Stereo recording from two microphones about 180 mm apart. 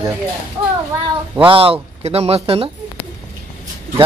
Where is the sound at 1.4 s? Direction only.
30° right (ahead or behind).